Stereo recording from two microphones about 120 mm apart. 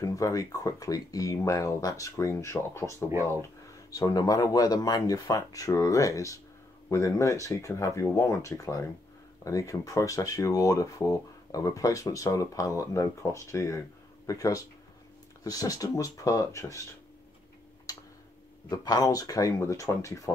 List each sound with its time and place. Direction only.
0.0 s speech: 25° left (ahead or behind)
17.9 s a sound: 30° left (ahead or behind)
18.7 s speech: 35° left (ahead or behind)